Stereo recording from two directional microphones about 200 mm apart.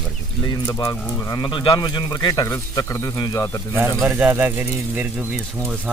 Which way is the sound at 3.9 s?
Centre (ahead or behind).